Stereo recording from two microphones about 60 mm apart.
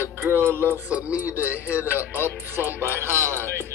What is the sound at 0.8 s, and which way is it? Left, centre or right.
Speech, right.